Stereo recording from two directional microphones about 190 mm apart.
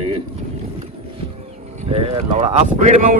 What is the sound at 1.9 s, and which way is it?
Speech, 30° right (ahead or behind).